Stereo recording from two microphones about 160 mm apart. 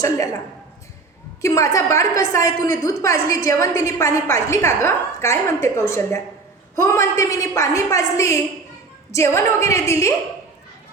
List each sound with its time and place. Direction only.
1.4 s a woman's voice: 20° left (ahead or behind)